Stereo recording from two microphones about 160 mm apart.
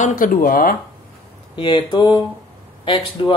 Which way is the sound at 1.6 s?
30° left (ahead or behind).